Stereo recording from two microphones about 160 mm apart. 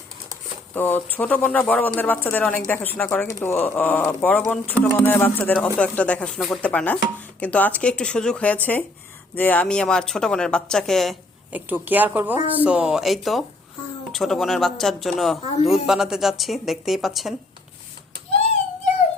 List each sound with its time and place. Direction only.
0.7 s speech: 10° left (ahead or behind)
11.5 s speech: 10° right (ahead or behind)
15.4 s a man's voice: 40° left (ahead or behind)
15.9 s speech: 5° right (ahead or behind)